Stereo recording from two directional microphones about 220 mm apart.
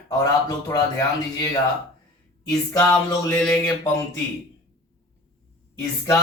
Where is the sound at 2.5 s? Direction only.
15° left (ahead or behind).